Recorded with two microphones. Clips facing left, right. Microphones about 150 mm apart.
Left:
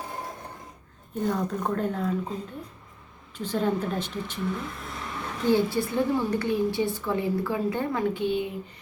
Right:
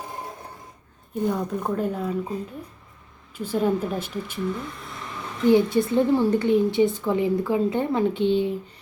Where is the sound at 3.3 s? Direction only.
10° right (ahead or behind).